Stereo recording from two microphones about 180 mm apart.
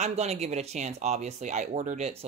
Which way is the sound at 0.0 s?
35° right (ahead or behind).